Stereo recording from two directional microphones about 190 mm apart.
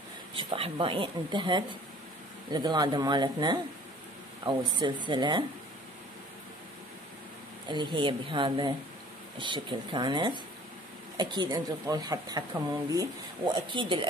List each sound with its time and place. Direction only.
0.4 s speech: 25° right (ahead or behind)
7.6 s speech: 25° right (ahead or behind)